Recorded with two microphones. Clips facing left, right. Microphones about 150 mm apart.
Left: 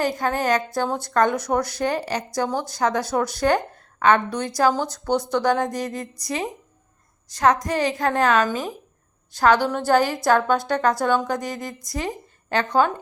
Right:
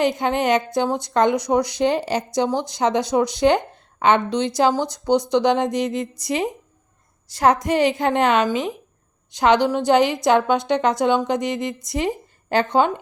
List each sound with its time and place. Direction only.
0.0 s a woman's voice: 20° right (ahead or behind)